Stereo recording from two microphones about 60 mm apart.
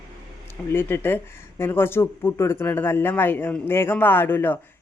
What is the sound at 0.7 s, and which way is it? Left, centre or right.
Speech, left.